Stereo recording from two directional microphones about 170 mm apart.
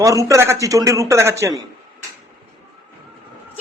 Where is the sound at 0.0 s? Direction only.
20° right (ahead or behind).